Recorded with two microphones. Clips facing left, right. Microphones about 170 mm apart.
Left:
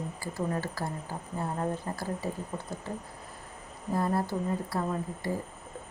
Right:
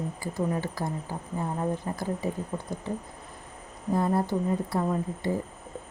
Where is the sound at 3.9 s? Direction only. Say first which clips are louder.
Right 3 dB; 20° right (ahead or behind).